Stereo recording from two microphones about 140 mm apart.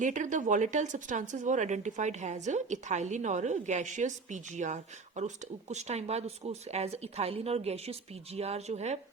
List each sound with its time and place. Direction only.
0.0 s speech: 65° right (ahead or behind)